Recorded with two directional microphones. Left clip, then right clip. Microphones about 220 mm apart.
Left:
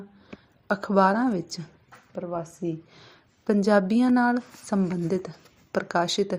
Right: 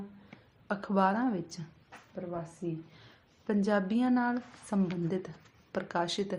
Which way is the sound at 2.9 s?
30° left (ahead or behind).